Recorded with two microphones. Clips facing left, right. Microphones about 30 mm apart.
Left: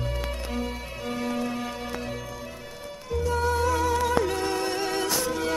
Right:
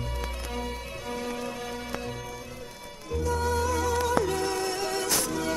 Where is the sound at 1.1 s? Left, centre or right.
Left.